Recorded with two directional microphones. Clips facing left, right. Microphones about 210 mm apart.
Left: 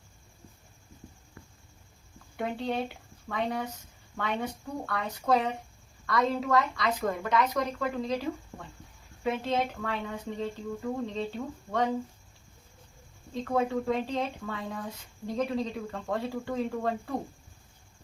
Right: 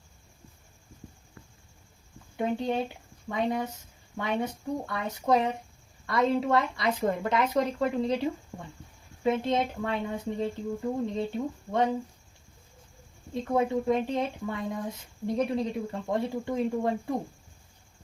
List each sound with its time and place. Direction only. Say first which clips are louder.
2.3 s speech: right 3 dB; 20° right (ahead or behind)
13.4 s speech: right 2 dB; 20° right (ahead or behind)